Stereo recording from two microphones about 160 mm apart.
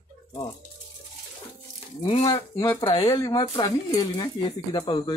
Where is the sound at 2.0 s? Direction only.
30° left (ahead or behind).